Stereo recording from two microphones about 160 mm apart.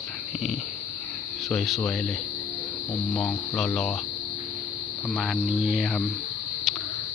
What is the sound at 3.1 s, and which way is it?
Speech, 5° left (ahead or behind).